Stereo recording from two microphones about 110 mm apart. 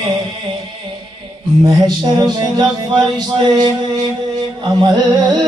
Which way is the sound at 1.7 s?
40° right (ahead or behind).